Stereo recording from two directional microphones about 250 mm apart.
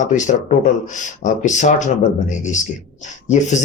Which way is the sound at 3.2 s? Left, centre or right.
Left.